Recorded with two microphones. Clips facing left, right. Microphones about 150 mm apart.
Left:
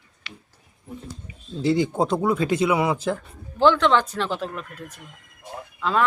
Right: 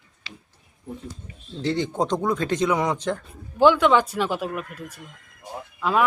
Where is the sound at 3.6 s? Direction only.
10° right (ahead or behind).